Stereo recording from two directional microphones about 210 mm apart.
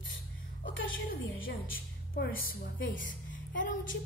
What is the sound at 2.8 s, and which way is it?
Speech, 65° left (ahead or behind).